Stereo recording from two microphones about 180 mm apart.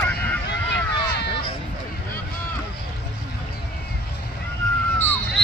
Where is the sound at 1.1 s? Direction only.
70° left (ahead or behind).